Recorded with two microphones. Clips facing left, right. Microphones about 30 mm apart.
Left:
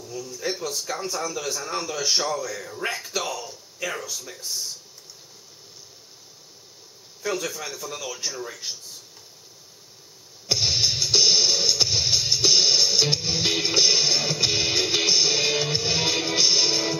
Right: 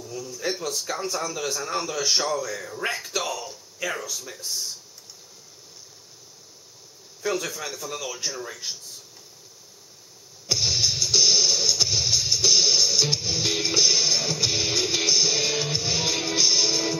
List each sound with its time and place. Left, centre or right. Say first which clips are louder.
0.0 s a man's voice: even; centre
7.2 s a man's voice: right 1 dB; centre
10.5 s music: left 1 dB; centre